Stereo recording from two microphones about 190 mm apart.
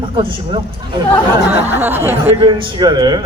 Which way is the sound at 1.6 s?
10° right (ahead or behind).